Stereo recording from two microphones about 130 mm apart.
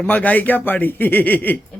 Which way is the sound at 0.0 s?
10° left (ahead or behind).